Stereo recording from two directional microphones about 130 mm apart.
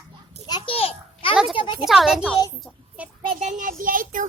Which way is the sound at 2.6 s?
Centre (ahead or behind).